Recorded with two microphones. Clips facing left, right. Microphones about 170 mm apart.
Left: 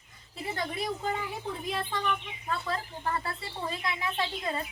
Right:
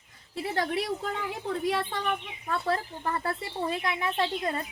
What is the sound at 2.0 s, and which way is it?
A woman's voice, 60° right (ahead or behind).